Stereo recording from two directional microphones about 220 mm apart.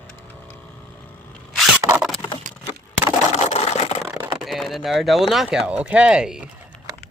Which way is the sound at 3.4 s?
30° left (ahead or behind).